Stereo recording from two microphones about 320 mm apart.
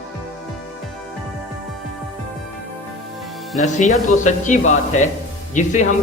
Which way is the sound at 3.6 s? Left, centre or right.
Left.